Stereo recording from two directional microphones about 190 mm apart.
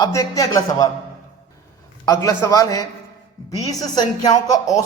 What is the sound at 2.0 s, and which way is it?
A man's voice, 15° left (ahead or behind).